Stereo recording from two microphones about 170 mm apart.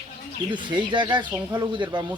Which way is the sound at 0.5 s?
25° right (ahead or behind).